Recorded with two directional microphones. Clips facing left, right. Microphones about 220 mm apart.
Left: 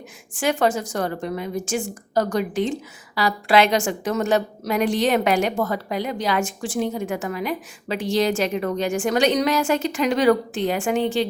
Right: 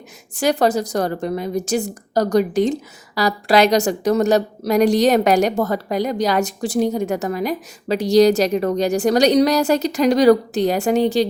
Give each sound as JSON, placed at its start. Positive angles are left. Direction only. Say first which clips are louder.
{"t": 0.3, "sound": "a woman's voice", "louder": "right 4 dB", "side_deg": -40}